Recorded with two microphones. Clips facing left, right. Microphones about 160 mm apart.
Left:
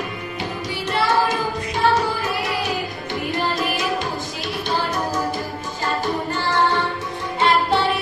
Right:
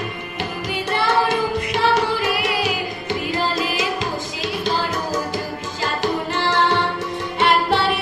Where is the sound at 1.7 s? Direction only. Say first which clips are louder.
Left 1 dB; 90° right.